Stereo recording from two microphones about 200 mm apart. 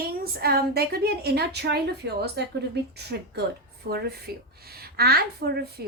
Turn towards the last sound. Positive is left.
turn(degrees=-50)  # may be behind; listen again after turning